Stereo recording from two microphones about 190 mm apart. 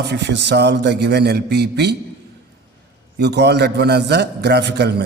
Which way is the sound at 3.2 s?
60° right (ahead or behind).